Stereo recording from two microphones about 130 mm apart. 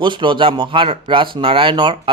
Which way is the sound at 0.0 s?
40° right (ahead or behind).